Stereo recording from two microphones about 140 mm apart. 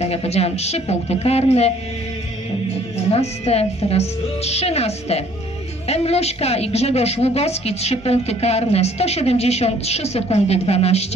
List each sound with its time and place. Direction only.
0.0 s a woman's voice: 45° left (ahead or behind)
3.0 s a woman's voice: 50° left (ahead or behind)